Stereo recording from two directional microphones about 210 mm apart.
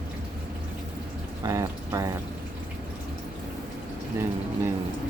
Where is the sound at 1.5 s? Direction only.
15° right (ahead or behind).